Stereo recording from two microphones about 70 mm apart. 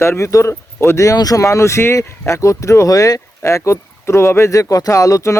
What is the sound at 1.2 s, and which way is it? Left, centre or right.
Speech, left.